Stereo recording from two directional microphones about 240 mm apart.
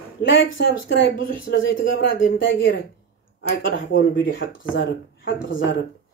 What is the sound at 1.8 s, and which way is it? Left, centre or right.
Speech, left.